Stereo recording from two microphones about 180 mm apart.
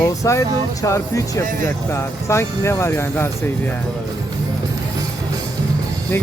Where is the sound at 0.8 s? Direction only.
20° left (ahead or behind).